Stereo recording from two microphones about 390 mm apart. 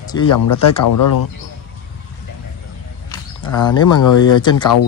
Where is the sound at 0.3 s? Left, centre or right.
Left.